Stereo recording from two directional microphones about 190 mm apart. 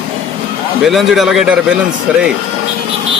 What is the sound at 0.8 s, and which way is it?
Speech, centre (ahead or behind).